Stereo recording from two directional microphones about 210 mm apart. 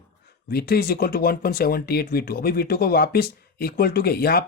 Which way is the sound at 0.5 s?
45° left (ahead or behind).